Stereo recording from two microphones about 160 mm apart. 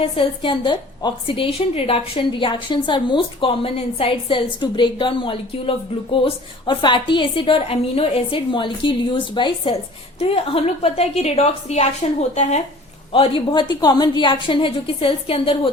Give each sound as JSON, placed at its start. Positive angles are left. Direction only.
{"t": 0.0, "sound": "a woman's voice", "side_deg": 30}